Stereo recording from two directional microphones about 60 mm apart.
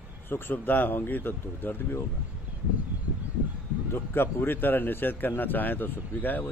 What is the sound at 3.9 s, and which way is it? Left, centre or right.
A man's voice, left.